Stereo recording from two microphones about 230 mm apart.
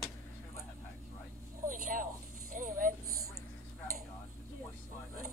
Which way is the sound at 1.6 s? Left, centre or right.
Right.